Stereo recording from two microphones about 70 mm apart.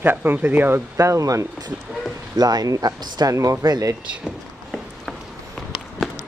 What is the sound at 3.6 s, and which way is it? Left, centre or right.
Speech, right.